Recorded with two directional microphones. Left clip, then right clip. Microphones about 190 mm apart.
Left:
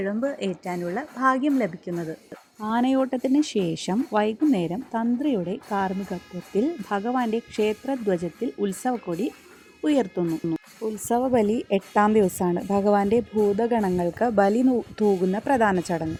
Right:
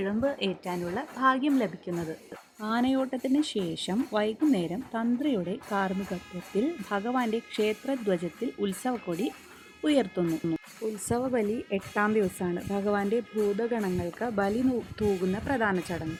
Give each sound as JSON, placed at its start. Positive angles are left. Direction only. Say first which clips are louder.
{"t": 0.0, "sound": "a woman's voice", "louder": "left 2 dB", "side_deg": 15}
{"t": 2.6, "sound": "speech", "louder": "left 5 dB", "side_deg": 30}
{"t": 11.3, "sound": "speech", "louder": "left 7 dB", "side_deg": 50}
{"t": 15.0, "sound": "speech", "louder": "left 6 dB", "side_deg": 35}
{"t": 15.4, "sound": "speech", "louder": "left 7 dB", "side_deg": 50}